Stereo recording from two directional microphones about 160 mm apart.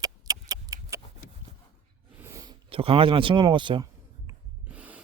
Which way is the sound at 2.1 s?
20° right (ahead or behind).